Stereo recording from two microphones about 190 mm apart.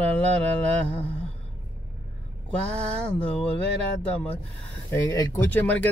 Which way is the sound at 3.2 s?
5° left (ahead or behind).